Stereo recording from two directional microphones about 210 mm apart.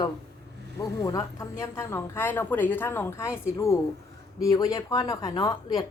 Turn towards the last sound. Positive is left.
turn(degrees=20)  # may be behind; listen again after turning